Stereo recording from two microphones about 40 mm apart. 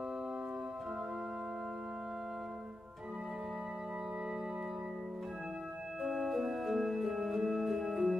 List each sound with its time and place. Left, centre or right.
6.0 s music: centre